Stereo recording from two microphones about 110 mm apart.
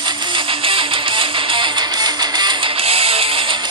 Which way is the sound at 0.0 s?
50° right (ahead or behind).